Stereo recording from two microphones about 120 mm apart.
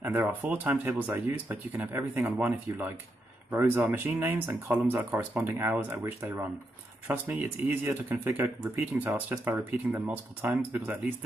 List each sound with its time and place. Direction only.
0.2 s speech: 15° right (ahead or behind)